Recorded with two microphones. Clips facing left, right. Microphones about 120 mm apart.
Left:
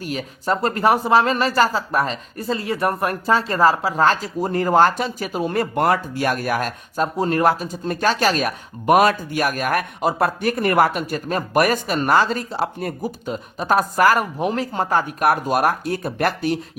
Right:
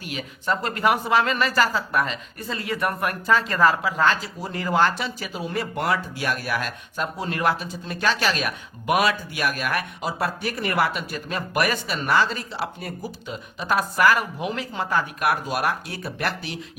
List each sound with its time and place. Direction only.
0.0 s speech: 40° left (ahead or behind)